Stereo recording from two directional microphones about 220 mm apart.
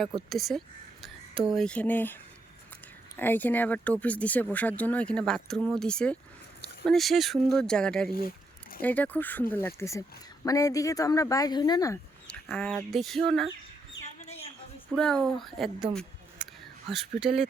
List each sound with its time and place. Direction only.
0.3 s speech: centre (ahead or behind)
3.2 s speech: 10° left (ahead or behind)
12.3 s speech: 5° left (ahead or behind)
14.0 s chicken: 60° left (ahead or behind)
14.9 s speech: 5° left (ahead or behind)
16.9 s speech: centre (ahead or behind)